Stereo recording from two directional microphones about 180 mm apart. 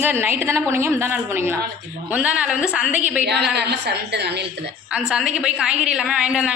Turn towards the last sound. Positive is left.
turn(degrees=-5)  # may be behind; listen again after turning